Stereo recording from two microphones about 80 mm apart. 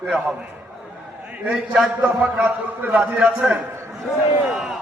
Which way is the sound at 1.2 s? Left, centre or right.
Centre.